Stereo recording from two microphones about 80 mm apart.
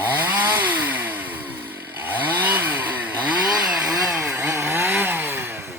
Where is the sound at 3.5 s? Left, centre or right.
Centre.